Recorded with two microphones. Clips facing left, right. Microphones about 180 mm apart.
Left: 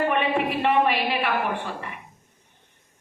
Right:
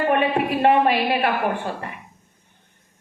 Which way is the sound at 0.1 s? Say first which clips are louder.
Right 4 dB; 45° right (ahead or behind).